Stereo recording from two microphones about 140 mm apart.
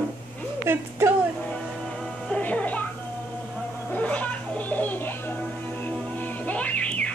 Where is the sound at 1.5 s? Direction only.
5° left (ahead or behind).